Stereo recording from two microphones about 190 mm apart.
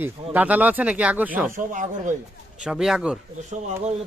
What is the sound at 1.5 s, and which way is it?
Speech, 45° right (ahead or behind).